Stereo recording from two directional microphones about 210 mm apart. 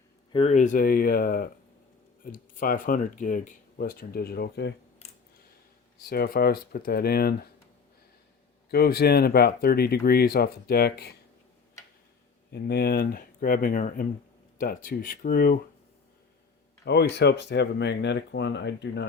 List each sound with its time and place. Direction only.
0.3 s speech: 35° left (ahead or behind); by 4.7 s 50° left (ahead or behind)
6.0 s speech: 45° left (ahead or behind)
8.7 s speech: 50° left (ahead or behind)
12.5 s speech: 50° left (ahead or behind)
16.8 s speech: 50° left (ahead or behind)